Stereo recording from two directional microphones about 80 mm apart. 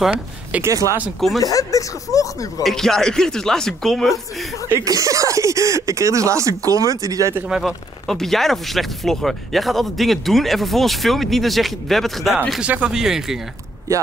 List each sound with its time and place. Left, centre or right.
0.0 s speech: centre
0.6 s speech: right
1.4 s speech: left
2.6 s speech: centre
4.8 s speech: right
7.4 s speech: centre
8.1 s speech: centre
12.6 s speech: centre